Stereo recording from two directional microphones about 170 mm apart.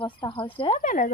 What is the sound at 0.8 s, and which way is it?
Speech, 50° left (ahead or behind).